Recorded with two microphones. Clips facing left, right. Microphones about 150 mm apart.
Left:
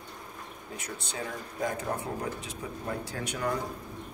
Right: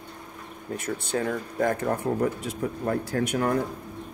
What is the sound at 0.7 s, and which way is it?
Speech, 55° right (ahead or behind).